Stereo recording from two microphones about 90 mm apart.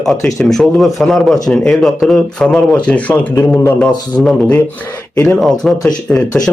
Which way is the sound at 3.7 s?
10° left (ahead or behind).